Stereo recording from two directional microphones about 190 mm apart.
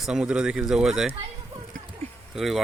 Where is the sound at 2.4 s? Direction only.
Centre (ahead or behind).